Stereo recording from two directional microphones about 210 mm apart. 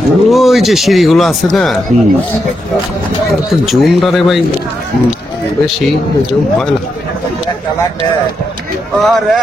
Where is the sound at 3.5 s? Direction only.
Centre (ahead or behind).